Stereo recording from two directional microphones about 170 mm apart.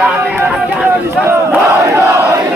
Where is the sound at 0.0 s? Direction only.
5° right (ahead or behind).